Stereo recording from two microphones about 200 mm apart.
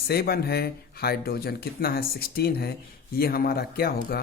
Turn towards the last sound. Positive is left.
turn(degrees=50)  # may be behind; listen again after turning